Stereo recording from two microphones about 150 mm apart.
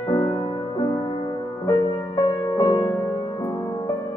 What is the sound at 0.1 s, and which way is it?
Music, 35° left (ahead or behind).